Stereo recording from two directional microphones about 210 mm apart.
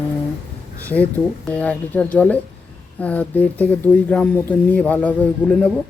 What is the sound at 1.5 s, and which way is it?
Speech, 5° left (ahead or behind).